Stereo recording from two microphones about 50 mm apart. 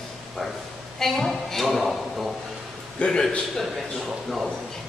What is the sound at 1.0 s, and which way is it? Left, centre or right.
A man's voice, centre.